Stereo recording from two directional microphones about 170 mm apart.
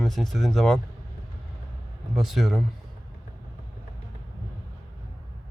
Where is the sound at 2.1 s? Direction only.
Centre (ahead or behind).